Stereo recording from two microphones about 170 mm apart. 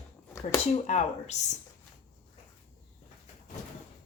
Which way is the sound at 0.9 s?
40° left (ahead or behind).